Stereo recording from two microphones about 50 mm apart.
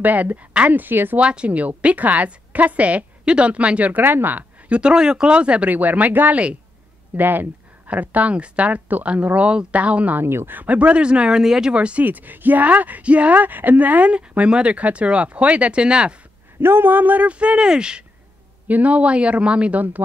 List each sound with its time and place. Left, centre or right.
0.0 s a woman's voice: right
0.5 s speech: right
0.7 s a woman's voice: right
1.2 s a woman's voice: right
4.6 s speech: right
7.2 s a sound: right
7.9 s speech: right
10.1 s speech: right
10.6 s speech: right; by 11.7 s centre
11.7 s speech: right
12.0 s a woman's voice: right; by 16.2 s centre
16.6 s speech: right; by 18.0 s centre
18.7 s speech: right